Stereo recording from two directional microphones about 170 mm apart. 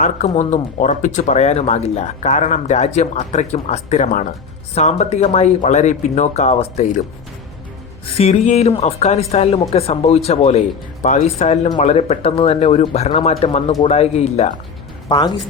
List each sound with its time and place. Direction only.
0.0 s speech: 45° left (ahead or behind)
8.1 s speech: 40° left (ahead or behind)
15.1 s speech: 25° left (ahead or behind)